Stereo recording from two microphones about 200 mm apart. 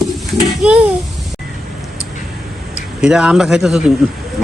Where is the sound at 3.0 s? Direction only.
5° right (ahead or behind).